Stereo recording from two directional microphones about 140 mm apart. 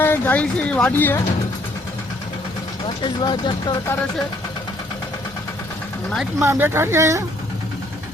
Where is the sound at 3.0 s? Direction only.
35° left (ahead or behind).